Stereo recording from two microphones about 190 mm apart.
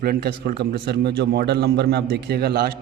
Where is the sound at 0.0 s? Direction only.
55° right (ahead or behind).